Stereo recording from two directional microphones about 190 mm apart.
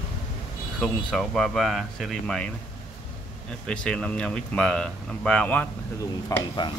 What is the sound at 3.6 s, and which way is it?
Speech, 5° left (ahead or behind).